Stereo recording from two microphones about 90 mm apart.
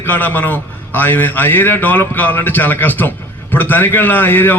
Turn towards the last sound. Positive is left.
turn(degrees=25)  # may be behind; listen again after turning